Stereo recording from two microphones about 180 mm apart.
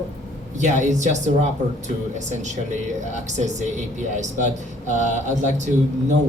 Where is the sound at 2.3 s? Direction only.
40° right (ahead or behind).